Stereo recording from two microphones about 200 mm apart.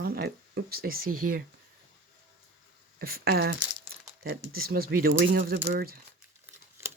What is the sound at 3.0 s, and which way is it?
Speech, 50° right (ahead or behind).